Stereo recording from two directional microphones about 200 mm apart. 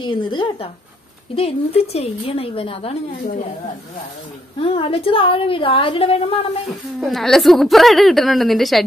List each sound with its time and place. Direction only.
0.0 s a woman's voice: 25° left (ahead or behind)
4.6 s a woman's voice: 30° left (ahead or behind)
7.0 s a woman's voice: centre (ahead or behind)